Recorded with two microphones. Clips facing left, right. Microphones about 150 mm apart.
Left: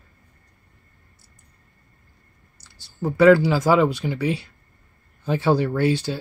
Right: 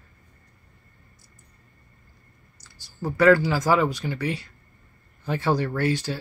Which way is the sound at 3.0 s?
20° left (ahead or behind).